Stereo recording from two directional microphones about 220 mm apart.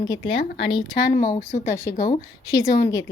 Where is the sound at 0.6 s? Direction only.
20° left (ahead or behind).